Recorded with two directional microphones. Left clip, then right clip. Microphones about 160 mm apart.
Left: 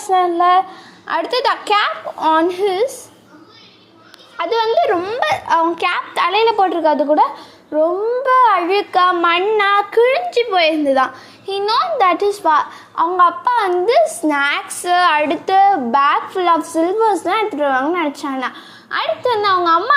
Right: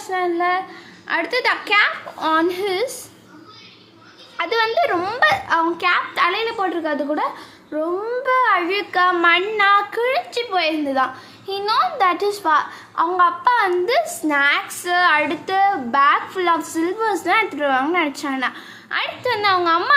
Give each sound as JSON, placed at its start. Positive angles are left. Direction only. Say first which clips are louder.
{"t": 0.0, "sound": "a woman's voice", "louder": "left 7 dB", "side_deg": 30}
{"t": 4.4, "sound": "a woman's voice", "louder": "left 3 dB", "side_deg": 10}
{"t": 5.2, "sound": "a woman's voice", "louder": "even", "side_deg": 25}
{"t": 14.0, "sound": "a child's voice", "louder": "left 9 dB", "side_deg": 0}
{"t": 14.3, "sound": "a woman's voice", "louder": "left 1 dB", "side_deg": 30}